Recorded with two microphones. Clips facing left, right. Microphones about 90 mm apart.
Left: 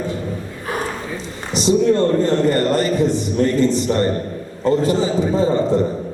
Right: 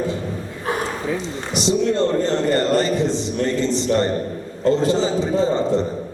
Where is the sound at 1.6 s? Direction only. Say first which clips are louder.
Left 4 dB; 25° right (ahead or behind).